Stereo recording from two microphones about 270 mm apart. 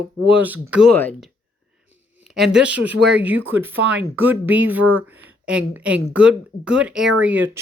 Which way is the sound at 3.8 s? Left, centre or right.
Right.